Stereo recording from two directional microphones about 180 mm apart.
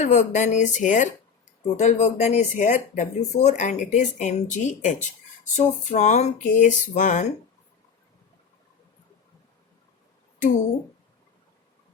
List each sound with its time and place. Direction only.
0.0 s speech: 40° left (ahead or behind)